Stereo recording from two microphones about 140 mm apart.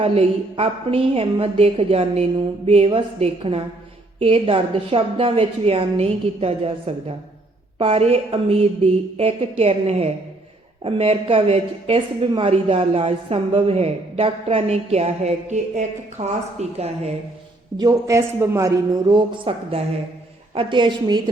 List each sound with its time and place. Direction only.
0.0 s a woman's voice: 45° right (ahead or behind)
17.7 s a man's voice: 25° right (ahead or behind)